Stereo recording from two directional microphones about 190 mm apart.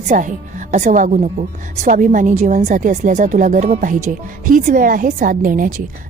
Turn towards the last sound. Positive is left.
turn(degrees=-45)  # may be behind; listen again after turning